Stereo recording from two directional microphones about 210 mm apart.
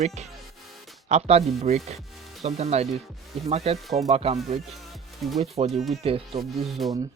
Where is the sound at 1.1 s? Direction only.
30° right (ahead or behind).